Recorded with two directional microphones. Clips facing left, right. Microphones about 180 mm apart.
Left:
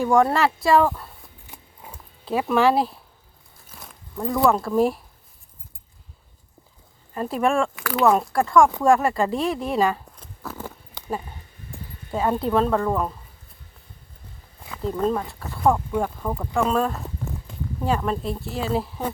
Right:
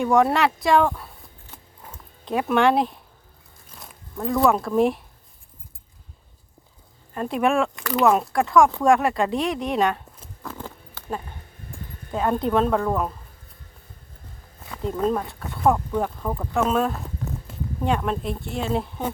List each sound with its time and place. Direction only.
0.0 s speech: centre (ahead or behind)
1.5 s a sound: 10° left (ahead or behind)
3.7 s speech: centre (ahead or behind)
7.1 s speech: centre (ahead or behind)
11.0 s a sound: 15° left (ahead or behind)
12.1 s speech: 5° left (ahead or behind)
14.7 s speech: centre (ahead or behind)